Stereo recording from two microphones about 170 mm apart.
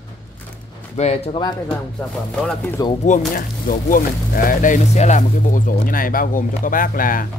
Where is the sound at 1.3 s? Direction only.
25° left (ahead or behind).